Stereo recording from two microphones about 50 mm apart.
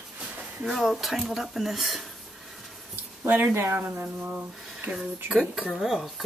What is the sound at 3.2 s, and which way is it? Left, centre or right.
Speech, right.